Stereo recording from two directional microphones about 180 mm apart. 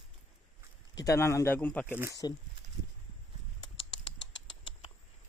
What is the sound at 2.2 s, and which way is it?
Speech, 20° left (ahead or behind).